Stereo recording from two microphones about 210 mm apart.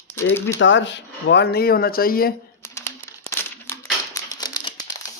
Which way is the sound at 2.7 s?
15° left (ahead or behind).